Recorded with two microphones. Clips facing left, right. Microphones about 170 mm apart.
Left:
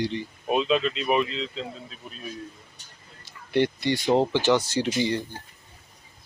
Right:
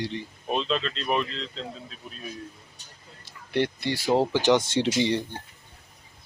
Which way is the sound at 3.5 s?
Centre (ahead or behind).